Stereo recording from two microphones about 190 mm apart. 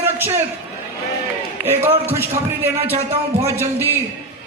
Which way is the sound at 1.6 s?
10° right (ahead or behind).